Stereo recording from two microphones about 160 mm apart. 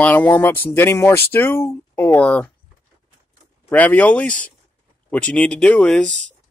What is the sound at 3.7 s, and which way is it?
Speech, 10° left (ahead or behind).